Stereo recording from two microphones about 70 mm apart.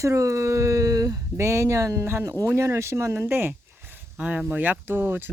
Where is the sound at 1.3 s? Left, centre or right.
Right.